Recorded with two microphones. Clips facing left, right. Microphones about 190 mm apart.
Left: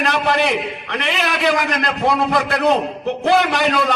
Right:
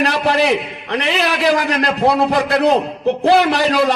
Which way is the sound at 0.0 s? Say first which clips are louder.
Right 2 dB; 35° right (ahead or behind).